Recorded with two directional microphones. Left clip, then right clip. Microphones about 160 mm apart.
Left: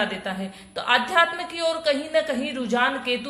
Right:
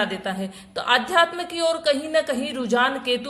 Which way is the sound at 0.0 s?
40° right (ahead or behind).